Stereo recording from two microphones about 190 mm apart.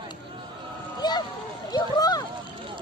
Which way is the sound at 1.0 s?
20° left (ahead or behind).